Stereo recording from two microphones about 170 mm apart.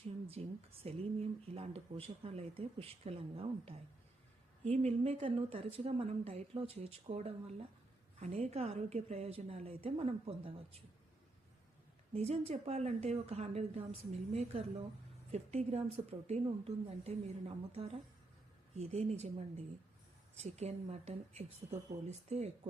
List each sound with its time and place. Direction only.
0.3 s speech: 35° right (ahead or behind)
12.1 s speech: 40° right (ahead or behind)